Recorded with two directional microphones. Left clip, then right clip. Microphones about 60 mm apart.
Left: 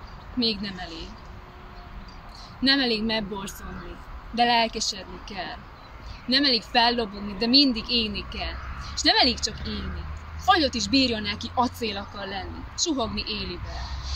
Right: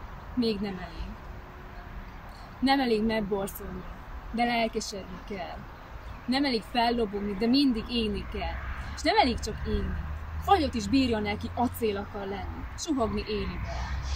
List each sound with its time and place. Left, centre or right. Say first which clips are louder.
0.4 s speech: left 3 dB; right
2.6 s speech: left 3 dB; right